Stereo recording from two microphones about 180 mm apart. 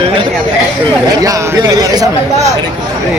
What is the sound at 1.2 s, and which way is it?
Speech, 20° right (ahead or behind).